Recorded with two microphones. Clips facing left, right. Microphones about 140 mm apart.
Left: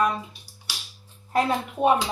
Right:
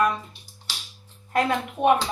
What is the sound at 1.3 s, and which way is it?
Speech, 30° left (ahead or behind).